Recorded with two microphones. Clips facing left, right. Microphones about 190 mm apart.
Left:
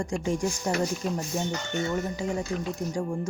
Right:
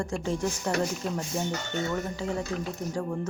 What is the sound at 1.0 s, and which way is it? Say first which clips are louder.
Speech: left 2 dB; centre (ahead or behind).